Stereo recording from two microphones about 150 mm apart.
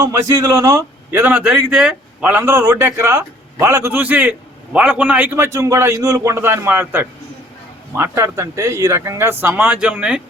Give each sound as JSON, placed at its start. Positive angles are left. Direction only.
{"t": 0.0, "sound": "a man's voice", "side_deg": -20}